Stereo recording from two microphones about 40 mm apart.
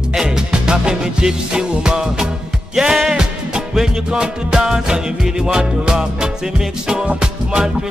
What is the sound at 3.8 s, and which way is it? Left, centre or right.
Music, centre.